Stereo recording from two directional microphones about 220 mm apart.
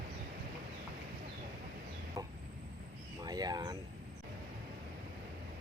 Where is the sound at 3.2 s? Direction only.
15° right (ahead or behind).